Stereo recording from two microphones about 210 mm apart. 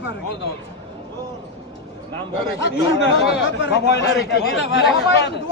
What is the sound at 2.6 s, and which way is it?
A man's voice, 55° left (ahead or behind).